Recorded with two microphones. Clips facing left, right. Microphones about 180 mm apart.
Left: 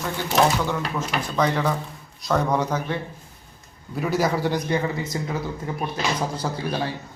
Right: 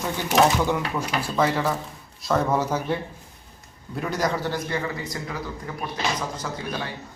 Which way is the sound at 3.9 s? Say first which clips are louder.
Left 3 dB; 5° left (ahead or behind).